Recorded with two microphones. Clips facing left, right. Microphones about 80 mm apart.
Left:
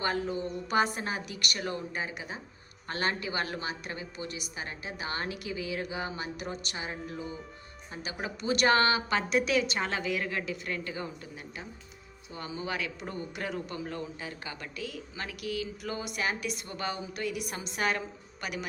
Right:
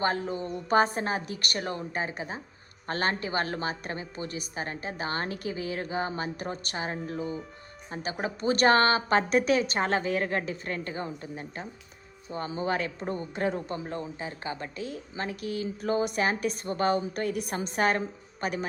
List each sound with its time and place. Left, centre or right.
0.0 s speech: right